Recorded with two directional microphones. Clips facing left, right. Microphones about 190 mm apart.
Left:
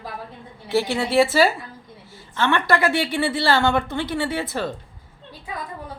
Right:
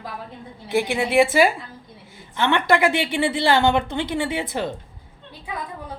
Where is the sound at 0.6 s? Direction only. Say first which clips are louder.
Even; 15° right (ahead or behind).